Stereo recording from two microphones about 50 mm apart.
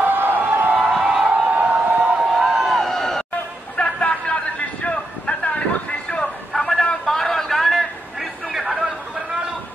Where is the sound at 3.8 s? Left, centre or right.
Left.